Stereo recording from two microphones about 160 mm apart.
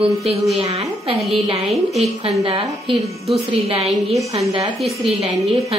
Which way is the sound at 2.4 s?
35° right (ahead or behind).